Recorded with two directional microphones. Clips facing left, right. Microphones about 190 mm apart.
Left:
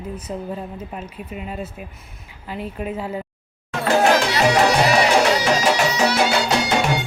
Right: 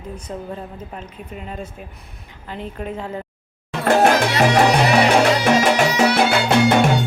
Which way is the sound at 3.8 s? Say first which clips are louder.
Right 2 dB; 55° right (ahead or behind).